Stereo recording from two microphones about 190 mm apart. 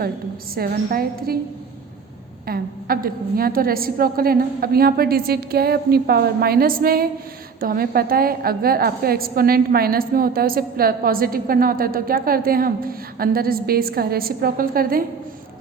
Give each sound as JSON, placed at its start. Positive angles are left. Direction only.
{"t": 0.5, "sound": "a woman's voice", "side_deg": -50}
{"t": 2.5, "sound": "a woman's voice", "side_deg": -50}